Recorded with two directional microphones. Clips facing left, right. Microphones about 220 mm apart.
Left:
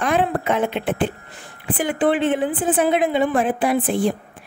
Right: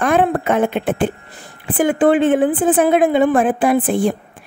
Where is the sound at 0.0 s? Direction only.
50° right (ahead or behind).